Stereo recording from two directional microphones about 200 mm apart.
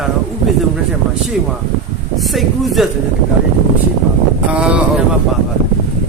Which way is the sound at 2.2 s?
Centre (ahead or behind).